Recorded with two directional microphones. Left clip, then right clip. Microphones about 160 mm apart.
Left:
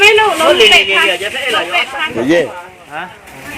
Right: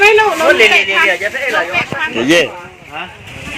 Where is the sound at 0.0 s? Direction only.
Centre (ahead or behind).